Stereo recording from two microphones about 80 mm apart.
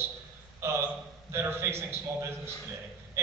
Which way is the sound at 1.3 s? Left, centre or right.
Right.